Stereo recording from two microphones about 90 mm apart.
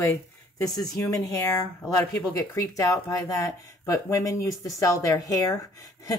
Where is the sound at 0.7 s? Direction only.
45° left (ahead or behind).